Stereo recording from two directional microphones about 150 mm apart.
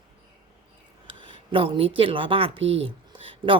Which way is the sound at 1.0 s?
35° right (ahead or behind).